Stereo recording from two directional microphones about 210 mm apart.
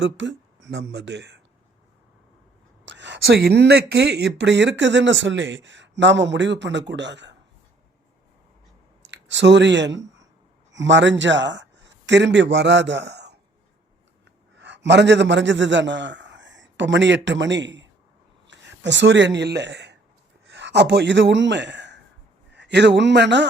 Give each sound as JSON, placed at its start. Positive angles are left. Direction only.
{"t": 0.0, "sound": "speech", "side_deg": -60}
{"t": 2.8, "sound": "speech", "side_deg": -55}
{"t": 9.0, "sound": "speech", "side_deg": -60}
{"t": 14.6, "sound": "a man's voice", "side_deg": -55}